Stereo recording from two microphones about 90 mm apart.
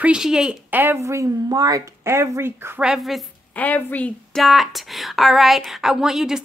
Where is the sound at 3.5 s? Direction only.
15° left (ahead or behind).